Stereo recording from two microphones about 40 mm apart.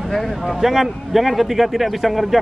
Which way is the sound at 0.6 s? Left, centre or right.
Centre.